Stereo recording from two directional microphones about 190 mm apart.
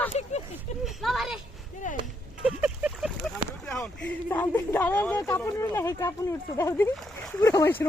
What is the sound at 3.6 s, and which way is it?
Speech, 5° left (ahead or behind).